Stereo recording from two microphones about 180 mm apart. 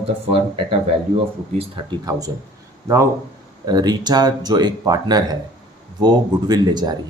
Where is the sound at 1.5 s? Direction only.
25° right (ahead or behind).